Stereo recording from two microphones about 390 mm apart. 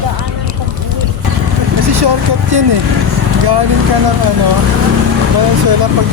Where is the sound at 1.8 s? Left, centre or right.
Right.